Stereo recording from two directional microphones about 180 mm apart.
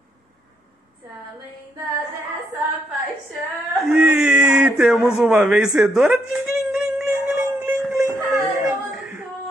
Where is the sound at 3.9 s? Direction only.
5° right (ahead or behind).